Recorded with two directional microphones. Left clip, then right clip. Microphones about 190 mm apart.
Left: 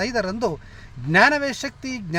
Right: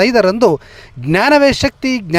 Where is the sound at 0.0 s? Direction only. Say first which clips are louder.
Right 13 dB; 40° right (ahead or behind).